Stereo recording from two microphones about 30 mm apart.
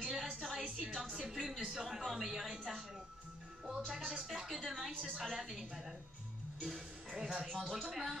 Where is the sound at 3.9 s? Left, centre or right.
Centre.